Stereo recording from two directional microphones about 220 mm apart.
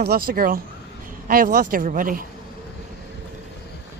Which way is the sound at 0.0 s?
45° right (ahead or behind).